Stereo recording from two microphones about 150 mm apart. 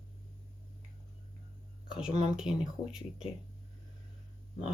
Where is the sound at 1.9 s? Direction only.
5° right (ahead or behind).